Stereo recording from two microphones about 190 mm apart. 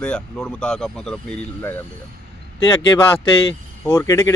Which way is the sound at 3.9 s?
15° left (ahead or behind).